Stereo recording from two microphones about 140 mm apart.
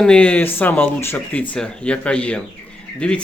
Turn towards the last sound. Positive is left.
turn(degrees=10)  # may be behind; listen again after turning